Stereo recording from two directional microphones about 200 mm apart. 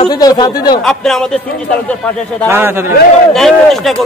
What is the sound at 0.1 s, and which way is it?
Speech, 20° left (ahead or behind).